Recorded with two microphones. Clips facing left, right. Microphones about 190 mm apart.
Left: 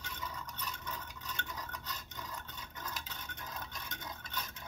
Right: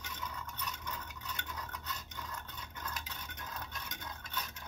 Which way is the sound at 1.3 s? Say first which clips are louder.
Left 1 dB; centre (ahead or behind).